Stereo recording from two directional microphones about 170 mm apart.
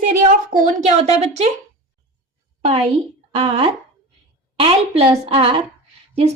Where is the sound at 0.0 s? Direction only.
50° right (ahead or behind).